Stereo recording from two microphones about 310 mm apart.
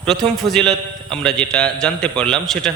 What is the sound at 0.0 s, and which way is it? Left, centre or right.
A man's voice, centre.